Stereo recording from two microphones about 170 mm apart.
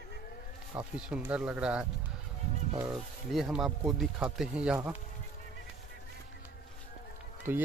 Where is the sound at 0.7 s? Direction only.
10° right (ahead or behind).